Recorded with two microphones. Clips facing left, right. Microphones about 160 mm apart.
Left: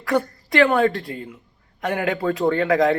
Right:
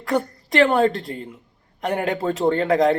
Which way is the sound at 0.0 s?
20° right (ahead or behind).